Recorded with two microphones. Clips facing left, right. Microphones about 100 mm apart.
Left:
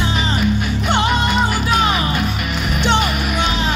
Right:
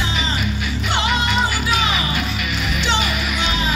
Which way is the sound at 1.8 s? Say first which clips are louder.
Left 4 dB; 45° left (ahead or behind).